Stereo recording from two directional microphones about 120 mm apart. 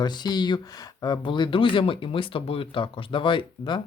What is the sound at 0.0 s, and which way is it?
Speech, 35° left (ahead or behind).